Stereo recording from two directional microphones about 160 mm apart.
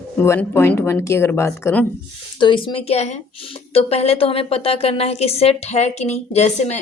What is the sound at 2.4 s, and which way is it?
A woman's voice, 30° left (ahead or behind).